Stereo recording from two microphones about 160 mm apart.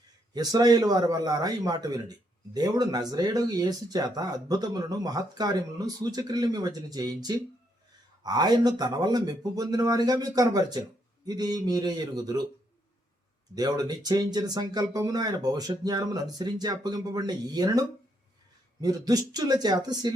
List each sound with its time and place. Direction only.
0.3 s a man's voice: 25° right (ahead or behind)
13.6 s a man's voice: 25° right (ahead or behind)